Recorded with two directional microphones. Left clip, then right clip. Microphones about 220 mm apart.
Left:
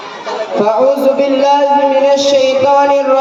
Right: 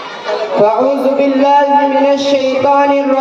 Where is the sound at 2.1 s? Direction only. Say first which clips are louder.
Left 2 dB; 50° left (ahead or behind).